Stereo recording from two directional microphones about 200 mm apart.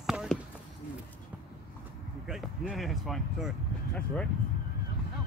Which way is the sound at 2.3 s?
Centre (ahead or behind).